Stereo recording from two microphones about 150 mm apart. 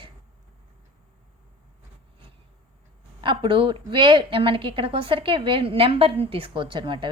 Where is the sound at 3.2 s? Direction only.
35° right (ahead or behind).